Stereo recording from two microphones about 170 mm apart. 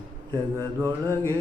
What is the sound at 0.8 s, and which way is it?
Mantra, 15° right (ahead or behind).